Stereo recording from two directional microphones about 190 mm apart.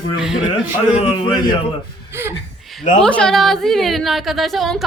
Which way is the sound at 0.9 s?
30° left (ahead or behind).